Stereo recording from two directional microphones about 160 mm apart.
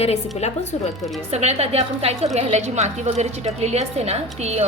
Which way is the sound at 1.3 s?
40° right (ahead or behind).